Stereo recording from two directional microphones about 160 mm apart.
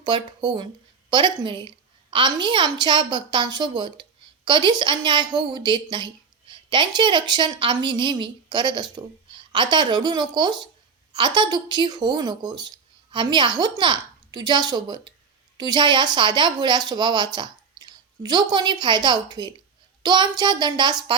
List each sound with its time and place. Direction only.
0.0 s speech: 30° right (ahead or behind)